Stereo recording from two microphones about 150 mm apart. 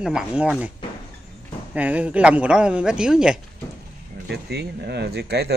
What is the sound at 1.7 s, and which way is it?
Speech, 10° right (ahead or behind).